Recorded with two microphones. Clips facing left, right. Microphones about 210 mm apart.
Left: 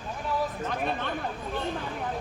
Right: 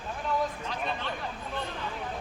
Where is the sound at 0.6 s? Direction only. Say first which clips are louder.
Left 4 dB; 50° left (ahead or behind).